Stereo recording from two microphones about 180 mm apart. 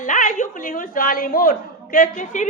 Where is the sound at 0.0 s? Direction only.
45° left (ahead or behind).